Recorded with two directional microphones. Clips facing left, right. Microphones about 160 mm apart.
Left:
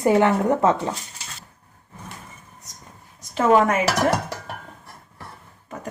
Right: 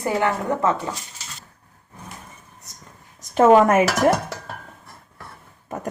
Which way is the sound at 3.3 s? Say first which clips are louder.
Right 4 dB; 50° right (ahead or behind).